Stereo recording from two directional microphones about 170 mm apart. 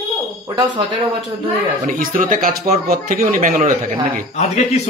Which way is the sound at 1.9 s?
55° right (ahead or behind).